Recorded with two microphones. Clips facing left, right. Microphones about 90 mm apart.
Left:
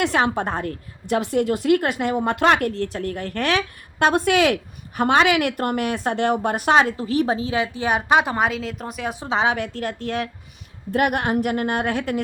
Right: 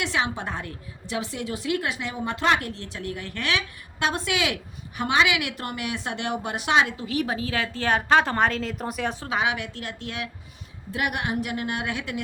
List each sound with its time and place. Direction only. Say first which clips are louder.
0.0 s a woman's voice: left 7 dB; 50° left (ahead or behind); by 9.1 s centre (ahead or behind)
9.2 s a woman's voice: left 7 dB; 30° left (ahead or behind)